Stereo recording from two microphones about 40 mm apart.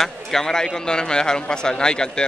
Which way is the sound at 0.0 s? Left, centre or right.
Centre.